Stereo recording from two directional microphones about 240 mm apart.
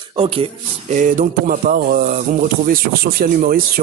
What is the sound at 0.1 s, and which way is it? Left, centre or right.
Speech, right.